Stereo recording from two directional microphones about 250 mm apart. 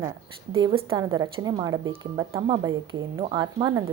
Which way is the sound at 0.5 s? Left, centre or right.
Right.